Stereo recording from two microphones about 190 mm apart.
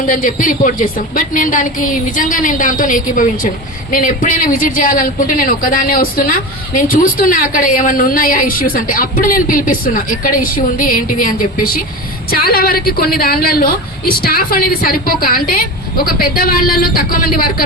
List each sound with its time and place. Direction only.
0.1 s a woman's voice: 45° left (ahead or behind)